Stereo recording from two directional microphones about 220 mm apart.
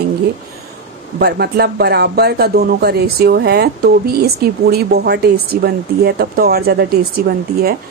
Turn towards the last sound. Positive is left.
turn(degrees=-45)  # may be behind; listen again after turning